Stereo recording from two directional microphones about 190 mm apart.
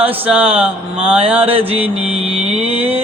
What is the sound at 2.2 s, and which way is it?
Mantra, 30° right (ahead or behind).